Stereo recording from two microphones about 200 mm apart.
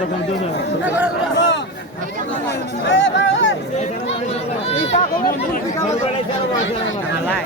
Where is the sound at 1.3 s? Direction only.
65° left (ahead or behind).